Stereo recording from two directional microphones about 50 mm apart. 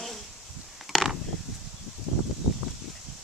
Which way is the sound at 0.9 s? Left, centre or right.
Centre.